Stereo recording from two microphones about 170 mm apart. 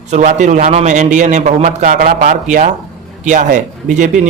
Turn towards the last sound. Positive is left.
turn(degrees=-45)  # may be behind; listen again after turning